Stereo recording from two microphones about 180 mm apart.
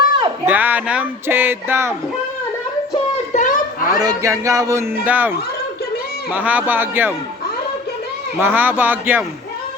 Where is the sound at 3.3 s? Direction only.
45° left (ahead or behind).